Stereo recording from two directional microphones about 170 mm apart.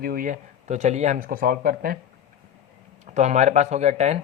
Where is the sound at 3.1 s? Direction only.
45° right (ahead or behind).